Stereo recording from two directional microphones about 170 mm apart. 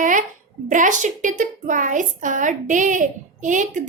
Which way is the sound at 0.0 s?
50° right (ahead or behind).